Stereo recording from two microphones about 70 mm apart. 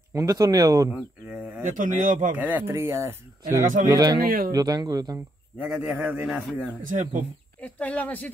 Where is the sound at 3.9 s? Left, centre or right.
Right.